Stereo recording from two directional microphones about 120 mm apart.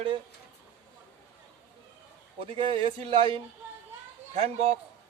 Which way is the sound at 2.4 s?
50° right (ahead or behind).